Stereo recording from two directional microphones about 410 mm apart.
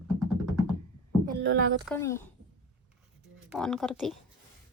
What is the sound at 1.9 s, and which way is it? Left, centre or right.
Speech, centre.